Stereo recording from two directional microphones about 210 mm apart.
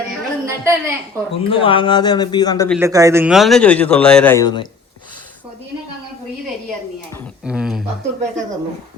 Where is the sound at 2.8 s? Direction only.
15° right (ahead or behind); by 4.6 s 20° left (ahead or behind).